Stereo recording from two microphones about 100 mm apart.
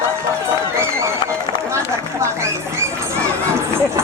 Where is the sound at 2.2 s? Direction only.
30° right (ahead or behind).